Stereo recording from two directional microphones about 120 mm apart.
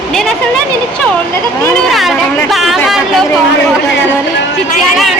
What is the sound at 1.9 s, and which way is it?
Speech, centre (ahead or behind).